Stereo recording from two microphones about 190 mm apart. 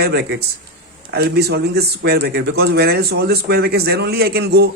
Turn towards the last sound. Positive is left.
turn(degrees=-55)  # may be behind; listen again after turning